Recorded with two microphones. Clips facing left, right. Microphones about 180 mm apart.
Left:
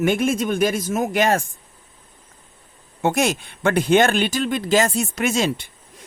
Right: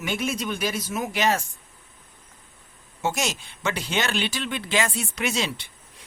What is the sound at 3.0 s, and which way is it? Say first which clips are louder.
Speech: left 7 dB; 55° left (ahead or behind).